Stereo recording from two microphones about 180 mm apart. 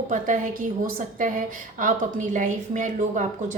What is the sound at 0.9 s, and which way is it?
A woman's voice, 50° right (ahead or behind).